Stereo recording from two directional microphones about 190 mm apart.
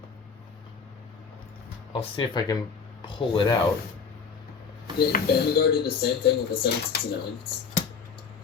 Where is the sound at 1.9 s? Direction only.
25° left (ahead or behind).